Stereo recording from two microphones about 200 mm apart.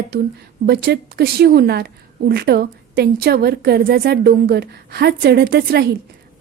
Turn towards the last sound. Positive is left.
turn(degrees=-50)  # may be behind; listen again after turning